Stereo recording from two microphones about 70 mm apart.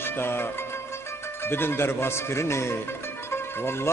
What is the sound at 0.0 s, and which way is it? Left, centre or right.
Music, left.